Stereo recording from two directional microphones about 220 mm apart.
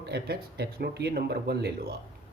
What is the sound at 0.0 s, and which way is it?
Speech, 45° right (ahead or behind).